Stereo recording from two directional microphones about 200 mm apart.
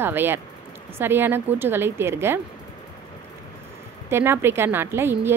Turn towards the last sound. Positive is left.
turn(degrees=-10)  # may be behind; listen again after turning